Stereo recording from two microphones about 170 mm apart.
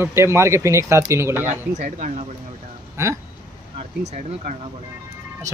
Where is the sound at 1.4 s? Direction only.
45° right (ahead or behind).